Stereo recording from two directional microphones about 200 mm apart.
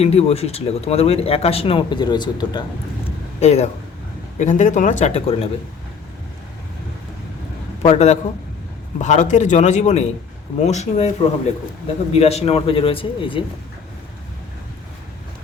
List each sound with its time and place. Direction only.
0.0 s speech: 30° left (ahead or behind)
3.4 s speech: 35° left (ahead or behind)
7.8 s a man's voice: 30° left (ahead or behind)
12.1 s speech: 30° left (ahead or behind)